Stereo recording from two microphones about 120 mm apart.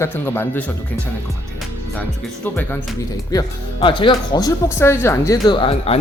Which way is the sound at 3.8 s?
45° left (ahead or behind).